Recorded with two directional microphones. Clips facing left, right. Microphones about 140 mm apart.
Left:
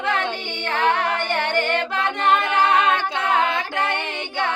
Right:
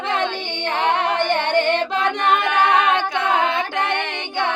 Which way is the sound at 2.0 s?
30° left (ahead or behind).